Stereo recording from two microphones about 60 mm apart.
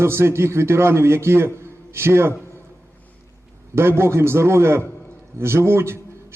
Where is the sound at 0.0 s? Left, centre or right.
Right.